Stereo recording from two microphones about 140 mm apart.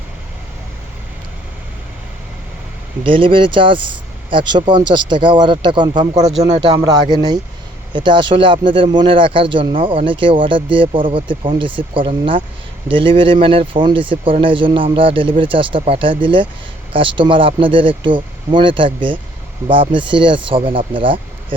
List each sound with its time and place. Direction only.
3.0 s speech: 40° right (ahead or behind)